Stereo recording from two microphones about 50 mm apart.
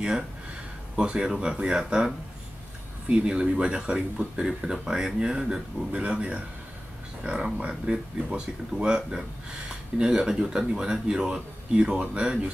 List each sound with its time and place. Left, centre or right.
0.9 s speech: centre